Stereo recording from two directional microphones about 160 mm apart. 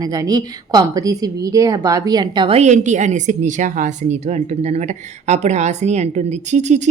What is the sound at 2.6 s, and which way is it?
A woman's voice, 50° right (ahead or behind).